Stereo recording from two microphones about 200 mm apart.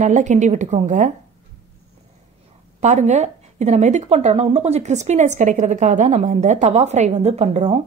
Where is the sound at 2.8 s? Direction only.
35° right (ahead or behind).